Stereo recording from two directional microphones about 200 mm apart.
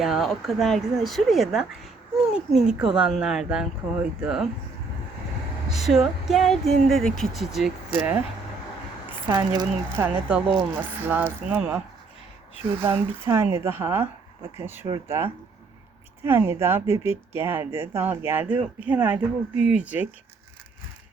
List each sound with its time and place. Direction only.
0.0 s speech: centre (ahead or behind)
5.7 s speech: centre (ahead or behind)
9.3 s speech: 20° right (ahead or behind)
10.2 s a woman's voice: 5° right (ahead or behind)
12.8 s a woman's voice: 10° right (ahead or behind)